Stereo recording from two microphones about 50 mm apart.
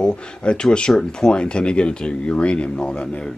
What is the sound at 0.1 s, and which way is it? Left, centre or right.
Speech, left.